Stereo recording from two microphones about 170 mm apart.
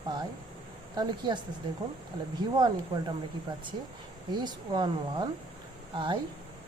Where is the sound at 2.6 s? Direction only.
25° right (ahead or behind).